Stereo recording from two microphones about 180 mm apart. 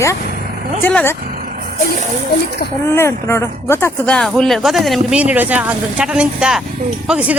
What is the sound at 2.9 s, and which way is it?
Speech, 15° left (ahead or behind).